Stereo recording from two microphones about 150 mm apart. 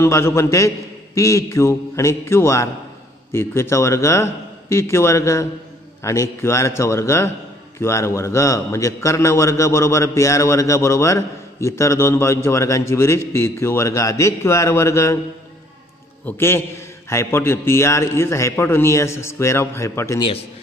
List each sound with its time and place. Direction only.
0.0 s a man's voice: 20° left (ahead or behind)
16.3 s a man's voice: 15° left (ahead or behind)